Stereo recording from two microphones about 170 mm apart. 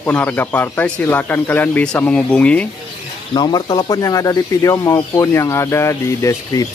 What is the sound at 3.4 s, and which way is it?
Speech, 25° left (ahead or behind).